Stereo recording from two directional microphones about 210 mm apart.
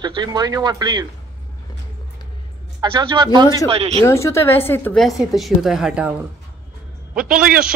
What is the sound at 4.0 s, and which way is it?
A woman's voice, 15° left (ahead or behind).